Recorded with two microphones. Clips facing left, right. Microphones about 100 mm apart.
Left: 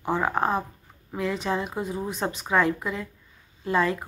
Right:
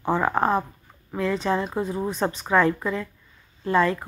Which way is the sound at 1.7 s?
25° right (ahead or behind).